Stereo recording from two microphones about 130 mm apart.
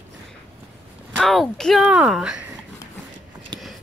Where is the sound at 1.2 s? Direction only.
Centre (ahead or behind).